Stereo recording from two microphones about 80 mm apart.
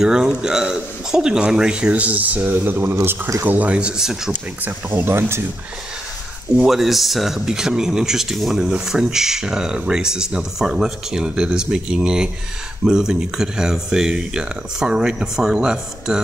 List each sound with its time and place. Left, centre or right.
0.0 s speech: centre; by 3.3 s right
3.4 s speech: centre
4.6 s speech: right
6.5 s speech: centre